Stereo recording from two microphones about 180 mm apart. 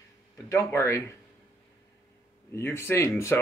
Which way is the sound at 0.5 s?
15° left (ahead or behind).